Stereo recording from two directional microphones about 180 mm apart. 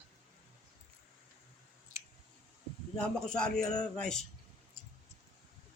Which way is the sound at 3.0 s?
5° left (ahead or behind).